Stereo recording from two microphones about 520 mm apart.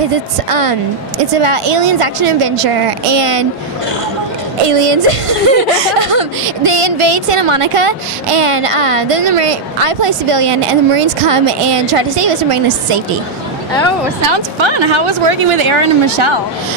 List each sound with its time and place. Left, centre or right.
0.1 s speech: right
4.6 s speech: right
14.3 s a woman's voice: right